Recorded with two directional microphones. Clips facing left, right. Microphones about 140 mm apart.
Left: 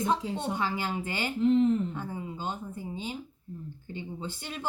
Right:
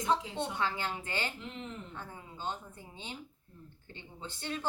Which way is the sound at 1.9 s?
15° left (ahead or behind).